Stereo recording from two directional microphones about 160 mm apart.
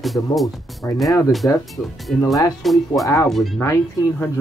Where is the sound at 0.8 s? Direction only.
15° left (ahead or behind).